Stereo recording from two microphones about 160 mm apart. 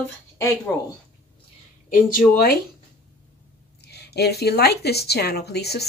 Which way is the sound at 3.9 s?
90° left.